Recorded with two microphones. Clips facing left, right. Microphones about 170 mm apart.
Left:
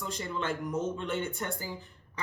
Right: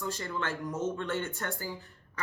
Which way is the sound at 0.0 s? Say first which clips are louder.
Even; 20° left (ahead or behind).